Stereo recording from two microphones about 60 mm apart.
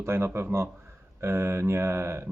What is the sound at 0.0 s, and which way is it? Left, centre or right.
Speech, right.